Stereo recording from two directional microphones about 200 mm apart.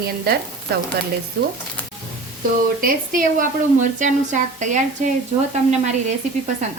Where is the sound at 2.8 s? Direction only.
40° right (ahead or behind).